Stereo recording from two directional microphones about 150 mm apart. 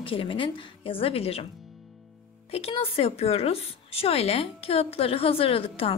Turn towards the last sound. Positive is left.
turn(degrees=40)  # may be behind; listen again after turning